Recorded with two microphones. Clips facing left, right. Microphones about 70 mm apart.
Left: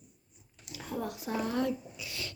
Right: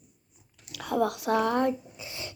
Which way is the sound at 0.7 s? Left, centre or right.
Right.